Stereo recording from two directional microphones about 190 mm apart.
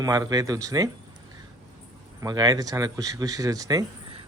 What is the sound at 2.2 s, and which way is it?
Speech, 20° right (ahead or behind).